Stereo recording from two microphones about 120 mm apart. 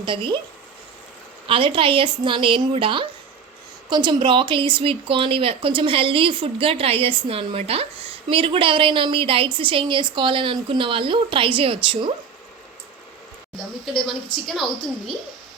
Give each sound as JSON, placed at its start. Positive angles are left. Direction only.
{"t": 0.0, "sound": "speech", "side_deg": -40}
{"t": 1.5, "sound": "speech", "side_deg": -50}
{"t": 13.9, "sound": "a woman's voice", "side_deg": 0}